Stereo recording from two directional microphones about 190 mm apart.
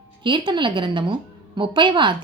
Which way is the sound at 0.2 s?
25° right (ahead or behind).